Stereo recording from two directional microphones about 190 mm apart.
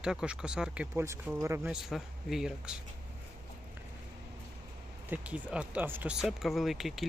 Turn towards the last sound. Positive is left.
turn(degrees=0)  # may be behind; listen again after turning